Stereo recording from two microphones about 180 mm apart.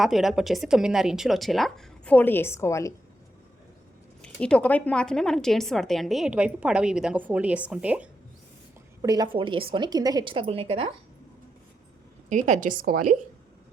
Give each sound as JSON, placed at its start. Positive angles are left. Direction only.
{"t": 0.0, "sound": "a woman's voice", "side_deg": 0}
{"t": 4.2, "sound": "a woman's voice", "side_deg": 5}
{"t": 9.0, "sound": "a woman's voice", "side_deg": -20}
{"t": 12.3, "sound": "a woman's voice", "side_deg": -45}